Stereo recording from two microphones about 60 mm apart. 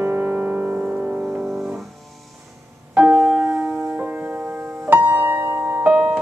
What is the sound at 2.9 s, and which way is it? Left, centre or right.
Music, right.